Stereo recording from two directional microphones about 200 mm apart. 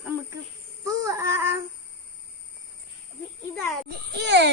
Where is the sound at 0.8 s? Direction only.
15° right (ahead or behind).